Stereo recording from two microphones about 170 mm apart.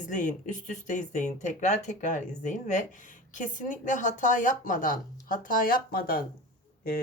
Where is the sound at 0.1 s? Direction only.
50° left (ahead or behind).